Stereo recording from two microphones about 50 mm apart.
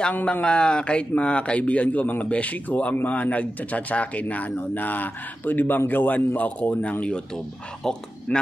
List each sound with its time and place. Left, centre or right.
0.2 s a man's voice: left
8.3 s a man's voice: left